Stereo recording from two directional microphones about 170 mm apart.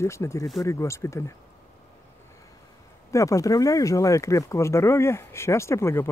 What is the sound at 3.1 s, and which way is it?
Speech, 20° left (ahead or behind).